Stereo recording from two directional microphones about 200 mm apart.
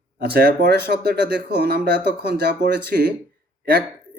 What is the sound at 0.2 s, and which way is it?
Speech, 50° right (ahead or behind).